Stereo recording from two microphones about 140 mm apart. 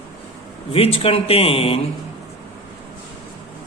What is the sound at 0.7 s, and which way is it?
Speech, 45° left (ahead or behind).